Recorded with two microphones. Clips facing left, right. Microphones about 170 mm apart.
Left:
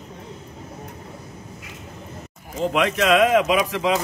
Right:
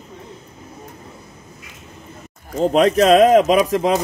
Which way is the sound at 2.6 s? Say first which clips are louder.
Right 7 dB; 35° right (ahead or behind).